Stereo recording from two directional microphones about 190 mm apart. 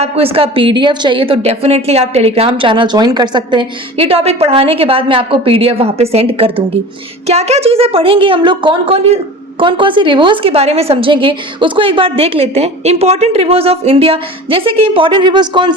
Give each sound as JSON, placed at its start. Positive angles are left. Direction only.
{"t": 0.0, "sound": "speech", "side_deg": -30}